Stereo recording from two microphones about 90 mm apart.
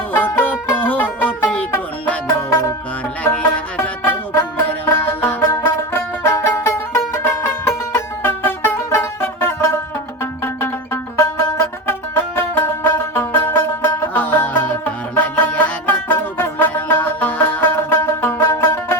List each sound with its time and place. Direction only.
0.1 s music: 25° left (ahead or behind)
2.2 s music: 35° left (ahead or behind)
3.2 s music: 15° left (ahead or behind)
3.8 s music: 25° left (ahead or behind)